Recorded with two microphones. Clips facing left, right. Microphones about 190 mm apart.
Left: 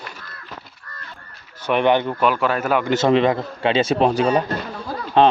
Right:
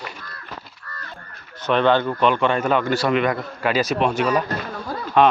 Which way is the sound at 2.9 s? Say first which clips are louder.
Left 3 dB; 25° left (ahead or behind).